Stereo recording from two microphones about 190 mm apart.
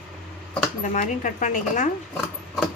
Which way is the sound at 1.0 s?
40° left (ahead or behind).